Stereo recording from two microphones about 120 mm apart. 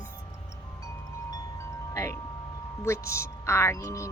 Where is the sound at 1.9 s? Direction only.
25° left (ahead or behind).